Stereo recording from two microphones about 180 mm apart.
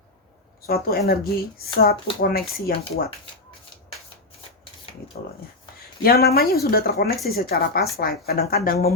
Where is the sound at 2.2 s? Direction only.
55° left (ahead or behind).